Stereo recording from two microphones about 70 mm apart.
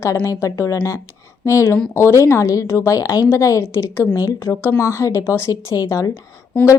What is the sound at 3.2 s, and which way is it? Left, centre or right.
A woman's voice, left.